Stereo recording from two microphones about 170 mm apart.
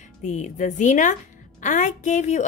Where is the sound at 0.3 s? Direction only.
45° left (ahead or behind).